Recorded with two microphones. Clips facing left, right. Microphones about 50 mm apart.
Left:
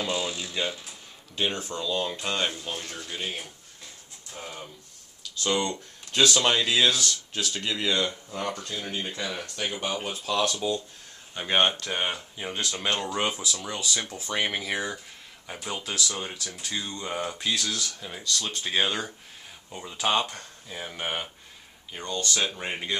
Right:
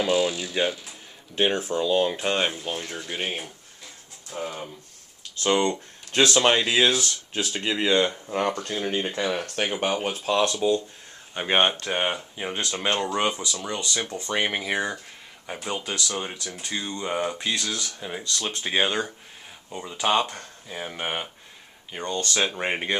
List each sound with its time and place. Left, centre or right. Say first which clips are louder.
0.0 s speech: right 7 dB; centre
3.1 s speech: right 4 dB; right
5.6 s speech: right 5 dB; centre
8.3 s speech: right 6 dB; right
10.0 s speech: right 4 dB; right
10.4 s speech: right 5 dB; centre
11.3 s speech: right 2 dB; right
13.3 s speech: right 2 dB; centre
14.3 s speech: right 3 dB; centre
16.7 s speech: right 4 dB; centre
17.8 s speech: right 2 dB; right
22.0 s speech: right 3 dB; right